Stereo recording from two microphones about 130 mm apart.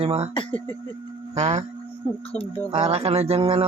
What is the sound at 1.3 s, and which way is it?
Speech, 55° right (ahead or behind).